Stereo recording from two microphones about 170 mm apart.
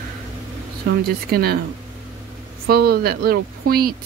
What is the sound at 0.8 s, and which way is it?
Speech, 65° right (ahead or behind).